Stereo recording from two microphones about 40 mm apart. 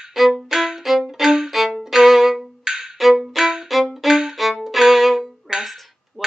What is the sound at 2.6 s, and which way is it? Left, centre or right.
Music, centre.